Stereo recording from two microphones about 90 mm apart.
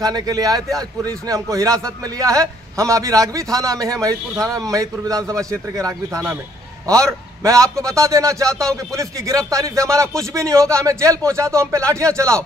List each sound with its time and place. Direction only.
0.0 s a man's voice: 45° right (ahead or behind)